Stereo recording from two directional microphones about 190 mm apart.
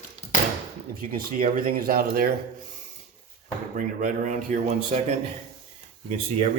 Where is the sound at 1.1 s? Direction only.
50° right (ahead or behind).